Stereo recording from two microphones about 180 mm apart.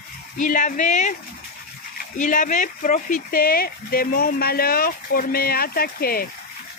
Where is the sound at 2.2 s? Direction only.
45° left (ahead or behind).